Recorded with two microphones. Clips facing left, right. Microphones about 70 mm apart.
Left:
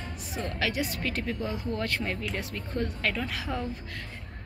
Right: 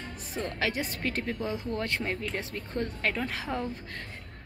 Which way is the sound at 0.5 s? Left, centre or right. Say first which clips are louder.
Left 2 dB; right.